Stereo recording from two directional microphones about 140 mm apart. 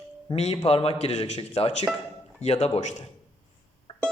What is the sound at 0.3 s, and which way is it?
A man's voice, 50° left (ahead or behind).